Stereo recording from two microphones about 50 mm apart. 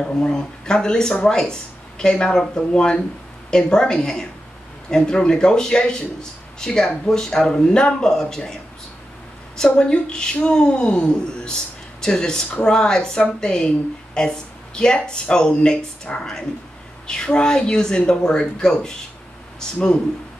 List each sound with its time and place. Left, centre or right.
0.0 s speech: centre
9.7 s speech: left